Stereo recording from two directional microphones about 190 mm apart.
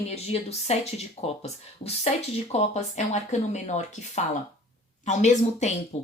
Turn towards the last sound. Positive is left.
turn(degrees=35)  # may be behind; listen again after turning